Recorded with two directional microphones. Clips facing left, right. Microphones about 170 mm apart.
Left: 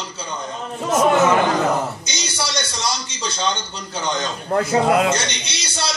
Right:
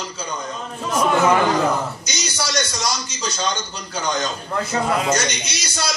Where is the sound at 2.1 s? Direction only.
25° left (ahead or behind).